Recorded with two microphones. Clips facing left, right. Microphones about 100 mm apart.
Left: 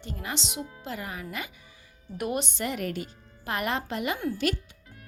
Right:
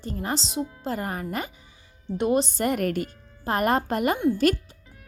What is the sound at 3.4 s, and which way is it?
Speech, 40° right (ahead or behind).